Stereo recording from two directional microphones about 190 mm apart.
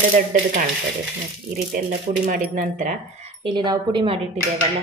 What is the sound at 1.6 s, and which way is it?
A woman's voice, 45° right (ahead or behind).